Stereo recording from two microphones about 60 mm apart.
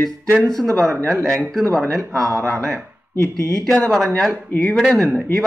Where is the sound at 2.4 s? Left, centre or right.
Centre.